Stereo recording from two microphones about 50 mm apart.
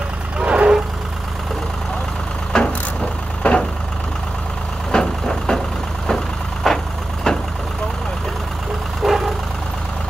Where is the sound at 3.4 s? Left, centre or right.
Left.